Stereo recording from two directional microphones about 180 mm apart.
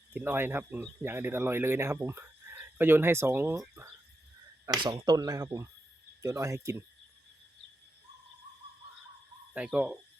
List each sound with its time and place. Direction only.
0.1 s speech: 10° right (ahead or behind)
4.6 s speech: 20° right (ahead or behind)
9.6 s speech: 5° right (ahead or behind)